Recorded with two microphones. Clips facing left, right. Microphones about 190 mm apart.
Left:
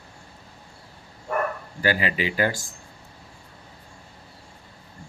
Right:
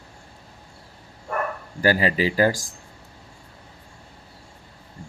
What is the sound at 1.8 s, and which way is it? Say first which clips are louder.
Speech: right 4 dB; 40° right (ahead or behind).